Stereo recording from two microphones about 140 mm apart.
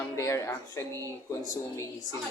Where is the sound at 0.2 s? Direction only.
20° left (ahead or behind).